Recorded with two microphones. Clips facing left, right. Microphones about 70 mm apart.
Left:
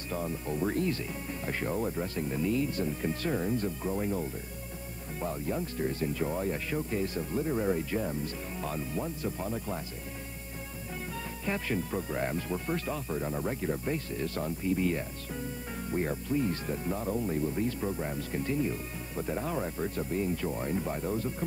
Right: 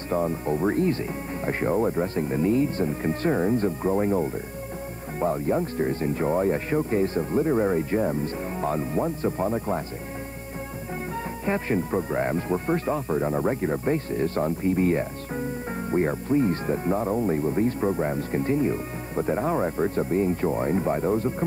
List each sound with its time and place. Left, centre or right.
0.1 s speech: right
11.4 s speech: right